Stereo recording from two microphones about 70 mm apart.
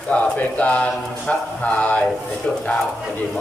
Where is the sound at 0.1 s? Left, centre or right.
Centre.